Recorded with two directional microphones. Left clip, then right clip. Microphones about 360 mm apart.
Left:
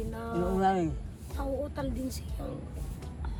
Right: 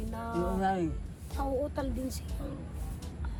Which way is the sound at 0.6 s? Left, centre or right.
Left.